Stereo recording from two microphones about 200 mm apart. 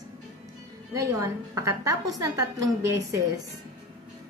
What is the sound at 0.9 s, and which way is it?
A woman's voice, 15° right (ahead or behind).